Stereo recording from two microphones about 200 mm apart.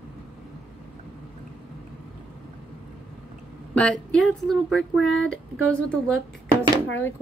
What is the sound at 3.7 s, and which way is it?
Speech, 5° left (ahead or behind).